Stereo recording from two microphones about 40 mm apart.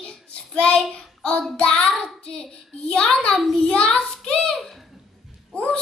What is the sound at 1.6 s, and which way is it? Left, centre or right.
Speech, left.